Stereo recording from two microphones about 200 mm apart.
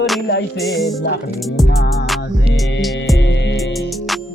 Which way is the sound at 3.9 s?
Centre (ahead or behind).